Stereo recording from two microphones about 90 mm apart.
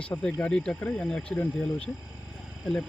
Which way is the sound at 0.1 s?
15° left (ahead or behind).